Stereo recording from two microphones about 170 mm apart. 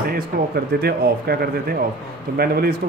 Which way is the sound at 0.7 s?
65° right (ahead or behind).